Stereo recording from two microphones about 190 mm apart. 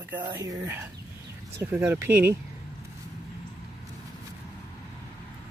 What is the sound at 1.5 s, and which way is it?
Speech, 10° right (ahead or behind).